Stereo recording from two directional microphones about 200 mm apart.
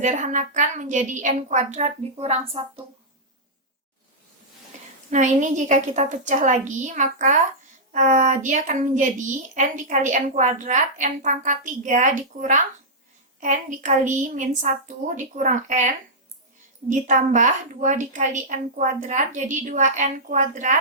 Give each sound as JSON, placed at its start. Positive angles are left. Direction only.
{"t": 0.0, "sound": "a woman's voice", "side_deg": -40}
{"t": 5.1, "sound": "a woman's voice", "side_deg": -35}
{"t": 16.9, "sound": "a woman's voice", "side_deg": -40}